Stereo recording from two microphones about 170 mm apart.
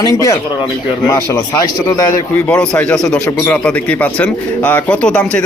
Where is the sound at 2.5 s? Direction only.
5° left (ahead or behind).